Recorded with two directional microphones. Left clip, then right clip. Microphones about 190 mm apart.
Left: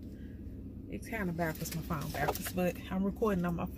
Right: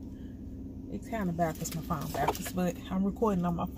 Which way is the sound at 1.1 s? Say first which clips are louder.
Right 4 dB; 10° right (ahead or behind).